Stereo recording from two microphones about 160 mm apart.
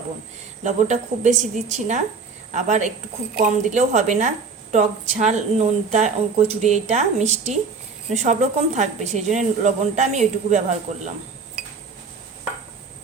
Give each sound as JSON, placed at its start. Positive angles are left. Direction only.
{"t": 0.6, "sound": "a woman's voice", "side_deg": -45}